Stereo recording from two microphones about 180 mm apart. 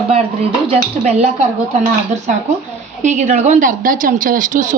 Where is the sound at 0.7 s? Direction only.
35° right (ahead or behind).